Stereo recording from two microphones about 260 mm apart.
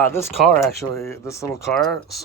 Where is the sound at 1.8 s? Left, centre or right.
Centre.